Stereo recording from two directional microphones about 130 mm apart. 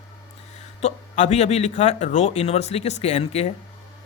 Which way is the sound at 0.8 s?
60° left (ahead or behind).